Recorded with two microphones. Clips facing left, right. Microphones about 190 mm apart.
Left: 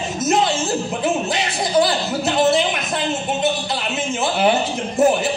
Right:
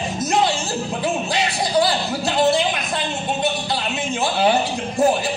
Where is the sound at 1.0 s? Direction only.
20° left (ahead or behind).